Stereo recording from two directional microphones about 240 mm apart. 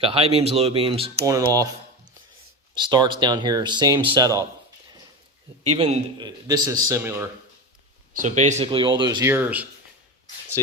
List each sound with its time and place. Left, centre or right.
0.0 s speech: right
2.7 s speech: centre
5.6 s speech: right
8.1 s speech: right; by 9.6 s centre